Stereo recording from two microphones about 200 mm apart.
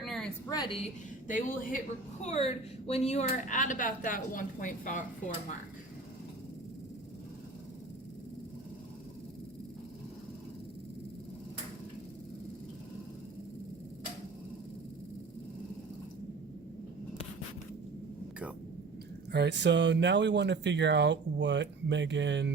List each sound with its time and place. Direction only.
0.0 s a sound: centre (ahead or behind)
0.5 s a woman's voice: 25° left (ahead or behind)
1.3 s a woman's voice: 40° left (ahead or behind)
2.2 s speech: 30° left (ahead or behind)
19.3 s speech: 60° right (ahead or behind)